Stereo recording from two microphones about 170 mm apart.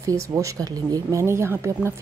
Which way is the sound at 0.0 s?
20° right (ahead or behind).